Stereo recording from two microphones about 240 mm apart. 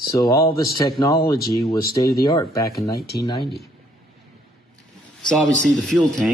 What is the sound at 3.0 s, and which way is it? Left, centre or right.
Speech, left.